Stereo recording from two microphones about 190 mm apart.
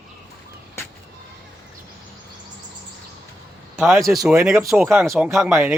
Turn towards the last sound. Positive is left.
turn(degrees=0)  # may be behind; listen again after turning